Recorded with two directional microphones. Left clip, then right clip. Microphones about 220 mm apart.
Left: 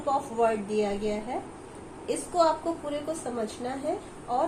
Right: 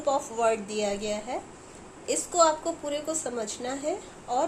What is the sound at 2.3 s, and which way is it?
A woman's voice, 55° right (ahead or behind).